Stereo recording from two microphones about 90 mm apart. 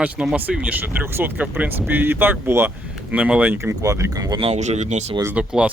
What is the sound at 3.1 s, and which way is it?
Speech, 15° right (ahead or behind).